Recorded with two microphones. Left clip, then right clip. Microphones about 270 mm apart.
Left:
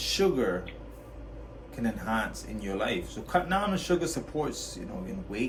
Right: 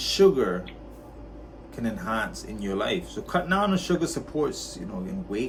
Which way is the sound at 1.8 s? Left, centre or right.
Centre.